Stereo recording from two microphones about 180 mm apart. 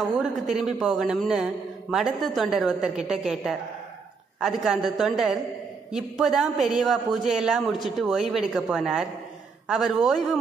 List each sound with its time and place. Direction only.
0.2 s a man's voice: centre (ahead or behind)